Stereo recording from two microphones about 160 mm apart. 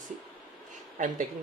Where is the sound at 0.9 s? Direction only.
55° right (ahead or behind).